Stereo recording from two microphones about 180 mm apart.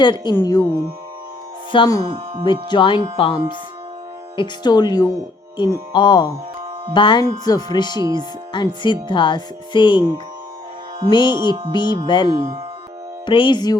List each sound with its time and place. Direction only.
0.0 s music: 25° left (ahead or behind)
1.7 s music: 25° left (ahead or behind)
11.1 s music: 25° left (ahead or behind)